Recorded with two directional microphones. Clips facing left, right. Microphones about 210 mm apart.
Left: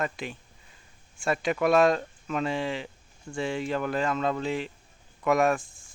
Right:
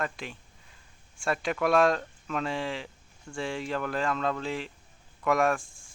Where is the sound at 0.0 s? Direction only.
Centre (ahead or behind).